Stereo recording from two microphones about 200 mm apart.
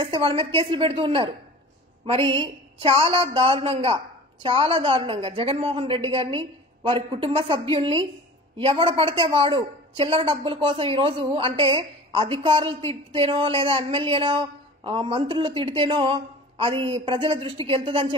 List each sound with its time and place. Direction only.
0.0 s speech: 25° right (ahead or behind)
2.3 s speech: 25° right (ahead or behind)